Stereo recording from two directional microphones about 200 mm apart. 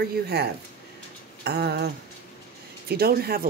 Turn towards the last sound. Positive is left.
turn(degrees=-50)  # may be behind; listen again after turning